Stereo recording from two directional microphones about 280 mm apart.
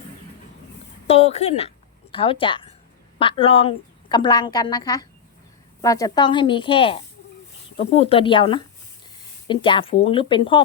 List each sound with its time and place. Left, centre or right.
1.0 s a woman's voice: left